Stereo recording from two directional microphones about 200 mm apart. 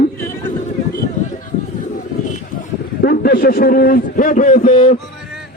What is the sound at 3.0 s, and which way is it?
A man's voice, 50° left (ahead or behind).